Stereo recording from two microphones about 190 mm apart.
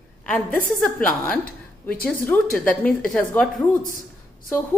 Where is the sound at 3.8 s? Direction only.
45° left (ahead or behind).